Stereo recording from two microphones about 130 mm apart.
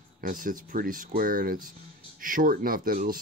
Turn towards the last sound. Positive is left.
turn(degrees=-90)